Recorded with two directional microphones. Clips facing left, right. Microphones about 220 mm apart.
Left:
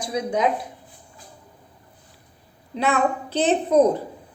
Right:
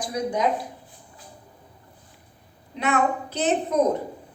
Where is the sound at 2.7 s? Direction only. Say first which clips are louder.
Left 2 dB; 30° left (ahead or behind).